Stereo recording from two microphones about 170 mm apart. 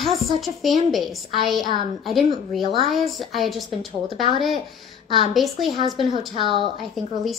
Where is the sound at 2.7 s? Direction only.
Centre (ahead or behind).